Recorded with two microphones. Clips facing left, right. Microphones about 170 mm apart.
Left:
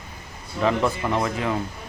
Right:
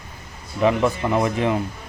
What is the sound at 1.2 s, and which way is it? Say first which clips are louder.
Speech: right 4 dB; 20° right (ahead or behind).